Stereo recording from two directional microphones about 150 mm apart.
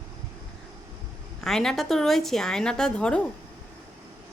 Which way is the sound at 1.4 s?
Centre (ahead or behind).